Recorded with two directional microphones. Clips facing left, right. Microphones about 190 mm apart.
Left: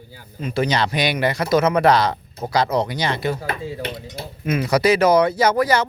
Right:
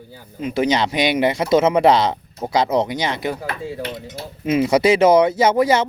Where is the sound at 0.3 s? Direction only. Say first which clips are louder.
Right 2 dB; 15° right (ahead or behind).